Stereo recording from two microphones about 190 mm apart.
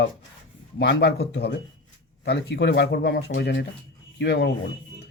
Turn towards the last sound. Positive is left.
turn(degrees=65)  # may be behind; listen again after turning